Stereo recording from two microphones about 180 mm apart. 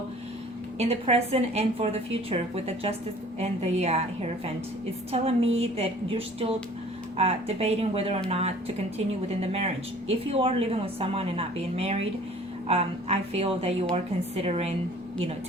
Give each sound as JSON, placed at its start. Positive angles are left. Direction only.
{"t": 0.8, "sound": "a woman's voice", "side_deg": -35}